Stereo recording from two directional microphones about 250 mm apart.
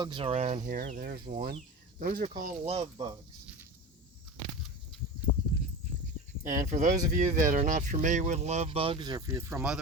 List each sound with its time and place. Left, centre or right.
0.0 s speech: centre
6.5 s speech: right; by 9.8 s centre